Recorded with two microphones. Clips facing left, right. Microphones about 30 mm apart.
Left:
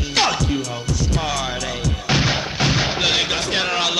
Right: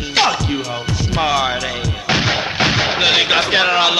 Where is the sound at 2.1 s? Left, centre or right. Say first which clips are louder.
Right 3 dB; centre.